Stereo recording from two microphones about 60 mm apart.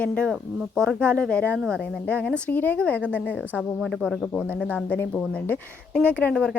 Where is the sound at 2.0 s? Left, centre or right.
Left.